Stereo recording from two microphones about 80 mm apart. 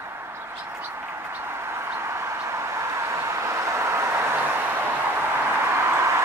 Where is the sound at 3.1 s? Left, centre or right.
Right.